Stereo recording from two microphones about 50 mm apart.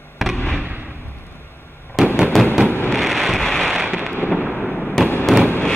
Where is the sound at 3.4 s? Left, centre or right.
Centre.